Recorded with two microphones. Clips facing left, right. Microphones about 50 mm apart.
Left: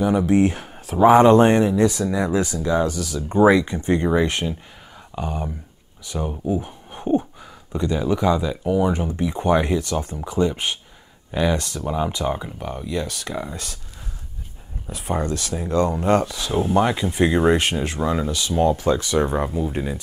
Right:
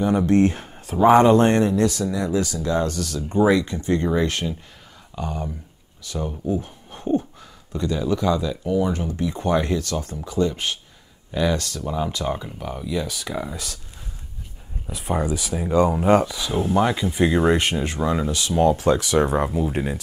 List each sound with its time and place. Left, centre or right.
0.0 s speech: centre
1.9 s speech: left
3.3 s speech: centre
14.9 s speech: centre
16.6 s speech: centre
19.5 s speech: right